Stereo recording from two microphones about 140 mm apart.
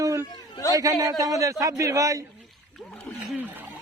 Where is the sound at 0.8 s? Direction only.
25° right (ahead or behind).